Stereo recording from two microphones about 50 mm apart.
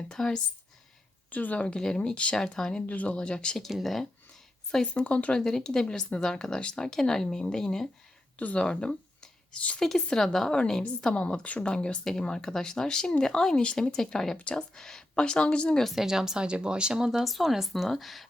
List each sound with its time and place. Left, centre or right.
0.1 s speech: centre
1.3 s speech: left
1.5 s speech: left
2.5 s speech: centre
2.8 s speech: left
3.2 s speech: centre
3.6 s speech: centre
4.9 s speech: left
5.3 s speech: centre
8.4 s speech: left
9.8 s speech: centre
16.0 s speech: centre
17.2 s speech: centre